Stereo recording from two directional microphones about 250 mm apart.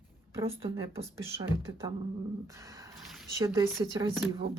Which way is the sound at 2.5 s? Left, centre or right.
Centre.